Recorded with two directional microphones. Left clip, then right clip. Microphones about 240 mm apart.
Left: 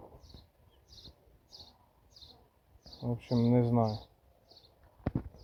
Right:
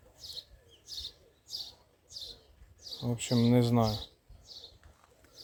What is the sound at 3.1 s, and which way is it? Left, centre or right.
Speech, centre.